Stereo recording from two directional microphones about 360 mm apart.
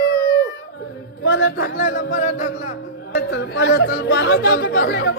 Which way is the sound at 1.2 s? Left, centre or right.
Left.